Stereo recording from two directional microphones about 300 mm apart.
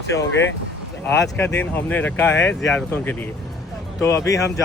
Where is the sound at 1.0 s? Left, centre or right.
Centre.